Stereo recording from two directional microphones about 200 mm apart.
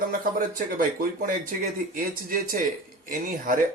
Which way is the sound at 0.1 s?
45° right (ahead or behind).